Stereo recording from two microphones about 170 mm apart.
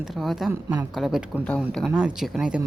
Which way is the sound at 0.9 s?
Centre (ahead or behind).